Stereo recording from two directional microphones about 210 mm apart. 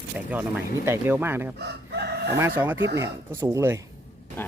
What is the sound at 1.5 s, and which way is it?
Chicken, 50° right (ahead or behind).